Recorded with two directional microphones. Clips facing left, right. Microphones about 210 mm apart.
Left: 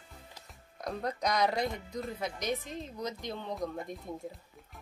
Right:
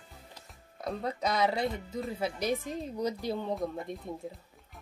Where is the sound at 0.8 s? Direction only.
5° right (ahead or behind).